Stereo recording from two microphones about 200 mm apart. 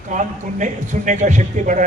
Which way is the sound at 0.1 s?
40° right (ahead or behind).